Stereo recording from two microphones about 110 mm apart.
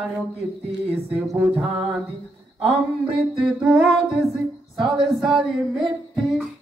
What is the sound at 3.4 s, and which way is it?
Mantra, 10° right (ahead or behind).